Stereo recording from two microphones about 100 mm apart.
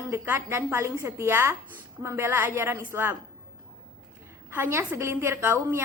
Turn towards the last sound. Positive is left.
turn(degrees=-25)  # may be behind; listen again after turning